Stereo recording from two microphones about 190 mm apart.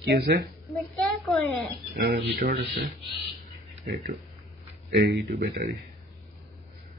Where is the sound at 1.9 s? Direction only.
60° right (ahead or behind).